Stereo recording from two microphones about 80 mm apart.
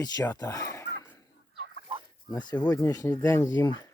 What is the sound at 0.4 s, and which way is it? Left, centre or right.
Speech, left.